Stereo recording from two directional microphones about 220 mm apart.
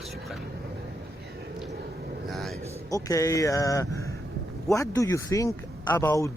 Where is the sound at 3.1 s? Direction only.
15° left (ahead or behind).